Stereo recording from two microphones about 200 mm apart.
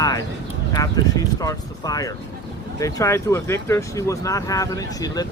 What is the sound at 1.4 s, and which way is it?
Speech, 20° left (ahead or behind).